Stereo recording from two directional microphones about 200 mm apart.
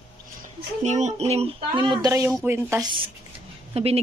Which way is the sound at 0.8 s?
35° right (ahead or behind).